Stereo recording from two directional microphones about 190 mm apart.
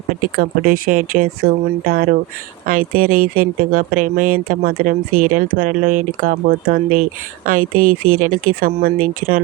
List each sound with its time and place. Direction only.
0.3 s speech: 50° right (ahead or behind)